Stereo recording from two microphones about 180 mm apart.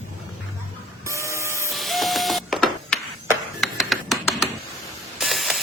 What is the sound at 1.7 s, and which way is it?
Printer, centre (ahead or behind).